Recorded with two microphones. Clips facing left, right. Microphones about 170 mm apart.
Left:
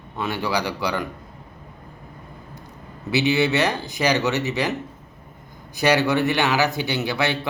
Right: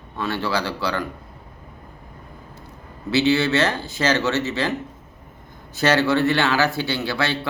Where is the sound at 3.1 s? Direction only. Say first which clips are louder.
Right 1 dB; 15° left (ahead or behind).